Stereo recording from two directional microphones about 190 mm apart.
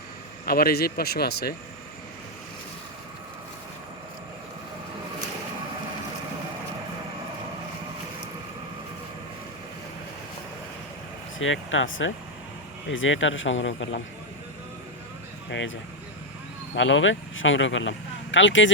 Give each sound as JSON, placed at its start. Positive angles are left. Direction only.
{"t": 0.4, "sound": "speech", "side_deg": 50}
{"t": 11.3, "sound": "speech", "side_deg": 90}
{"t": 15.4, "sound": "speech", "side_deg": 75}
{"t": 16.7, "sound": "speech", "side_deg": 80}